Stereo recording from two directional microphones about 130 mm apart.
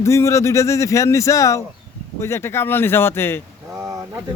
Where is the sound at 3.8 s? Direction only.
25° right (ahead or behind).